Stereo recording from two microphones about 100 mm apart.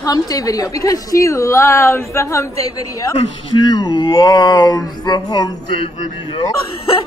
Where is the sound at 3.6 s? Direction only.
40° left (ahead or behind).